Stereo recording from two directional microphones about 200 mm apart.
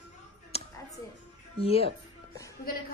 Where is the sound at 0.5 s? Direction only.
30° left (ahead or behind).